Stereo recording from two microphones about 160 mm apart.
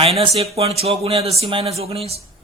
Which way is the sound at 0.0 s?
40° right (ahead or behind).